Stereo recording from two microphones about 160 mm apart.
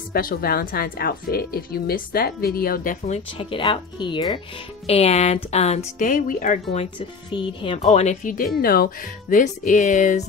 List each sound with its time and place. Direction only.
0.1 s speech: 65° left (ahead or behind)
3.3 s speech: 35° left (ahead or behind)
4.8 s speech: 40° left (ahead or behind)
7.8 s speech: 45° left (ahead or behind)
8.5 s speech: 70° left (ahead or behind)
9.4 s speech: 50° left (ahead or behind)